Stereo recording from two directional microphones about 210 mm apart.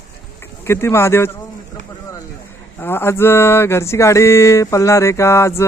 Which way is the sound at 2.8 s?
10° left (ahead or behind).